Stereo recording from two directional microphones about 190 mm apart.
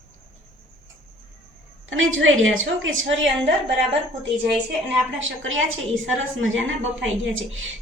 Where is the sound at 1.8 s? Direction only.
90° right.